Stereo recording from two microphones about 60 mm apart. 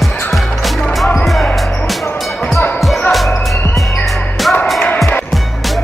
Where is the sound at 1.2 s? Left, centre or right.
Centre.